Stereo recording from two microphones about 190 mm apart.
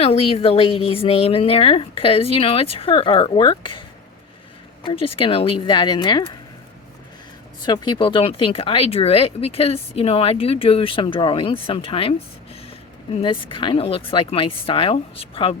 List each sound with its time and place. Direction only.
0.0 s speech: 30° left (ahead or behind)
7.6 s speech: 20° left (ahead or behind)
13.2 s speech: 25° left (ahead or behind)